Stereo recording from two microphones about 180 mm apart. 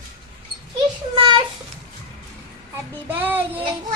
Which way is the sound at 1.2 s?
25° right (ahead or behind).